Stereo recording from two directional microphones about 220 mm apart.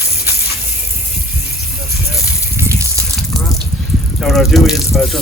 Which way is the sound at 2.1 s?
10° right (ahead or behind).